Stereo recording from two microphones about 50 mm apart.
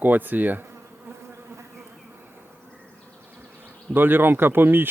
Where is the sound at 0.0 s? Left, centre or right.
Right.